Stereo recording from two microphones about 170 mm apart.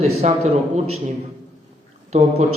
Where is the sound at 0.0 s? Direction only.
40° right (ahead or behind).